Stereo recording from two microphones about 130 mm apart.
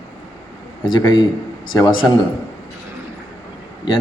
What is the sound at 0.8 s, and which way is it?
A man's voice, 35° left (ahead or behind).